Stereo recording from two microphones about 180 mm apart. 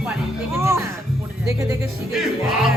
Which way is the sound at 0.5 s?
15° right (ahead or behind).